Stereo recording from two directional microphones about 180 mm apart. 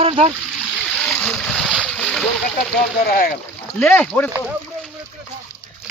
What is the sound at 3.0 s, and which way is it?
Speech, 55° left (ahead or behind).